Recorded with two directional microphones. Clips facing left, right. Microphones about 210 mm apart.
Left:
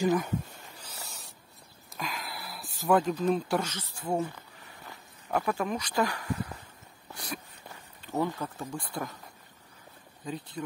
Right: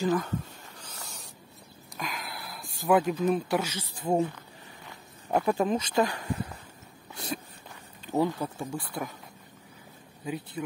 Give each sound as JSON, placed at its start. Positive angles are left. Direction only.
{"t": 0.0, "sound": "a sound", "side_deg": 15}
{"t": 2.0, "sound": "speech", "side_deg": 0}
{"t": 5.3, "sound": "speech", "side_deg": -25}
{"t": 8.0, "sound": "speech", "side_deg": -15}
{"t": 10.2, "sound": "speech", "side_deg": -10}